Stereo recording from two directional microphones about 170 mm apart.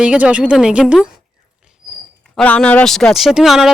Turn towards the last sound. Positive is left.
turn(degrees=0)  # may be behind; listen again after turning